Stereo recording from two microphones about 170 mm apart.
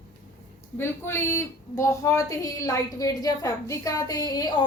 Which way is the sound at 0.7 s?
15° left (ahead or behind).